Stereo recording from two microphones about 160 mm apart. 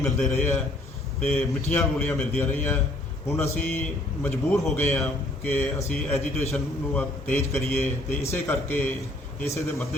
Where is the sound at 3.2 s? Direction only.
15° left (ahead or behind).